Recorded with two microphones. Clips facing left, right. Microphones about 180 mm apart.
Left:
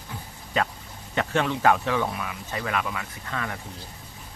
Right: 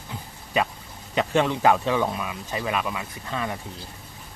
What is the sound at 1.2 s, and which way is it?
Speech, 20° right (ahead or behind).